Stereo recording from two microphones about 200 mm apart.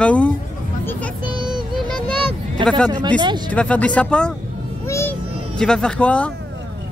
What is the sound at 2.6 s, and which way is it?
Speech, 25° right (ahead or behind).